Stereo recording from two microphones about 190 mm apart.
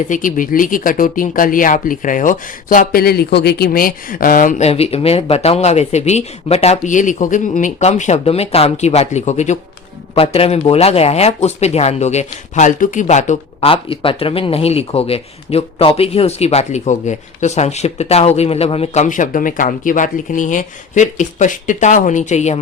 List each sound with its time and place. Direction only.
0.1 s speech: 45° left (ahead or behind)